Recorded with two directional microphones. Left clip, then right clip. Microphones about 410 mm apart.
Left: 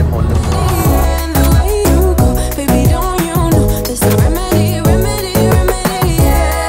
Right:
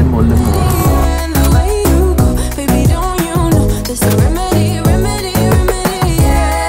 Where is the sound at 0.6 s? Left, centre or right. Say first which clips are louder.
Even; centre.